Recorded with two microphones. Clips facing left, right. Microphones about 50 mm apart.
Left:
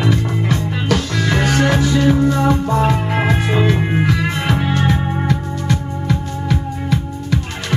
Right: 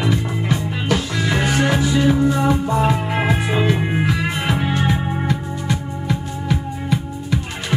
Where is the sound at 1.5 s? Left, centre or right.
Left.